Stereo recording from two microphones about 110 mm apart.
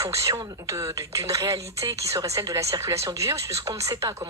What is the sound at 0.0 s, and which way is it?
Speech, 30° right (ahead or behind).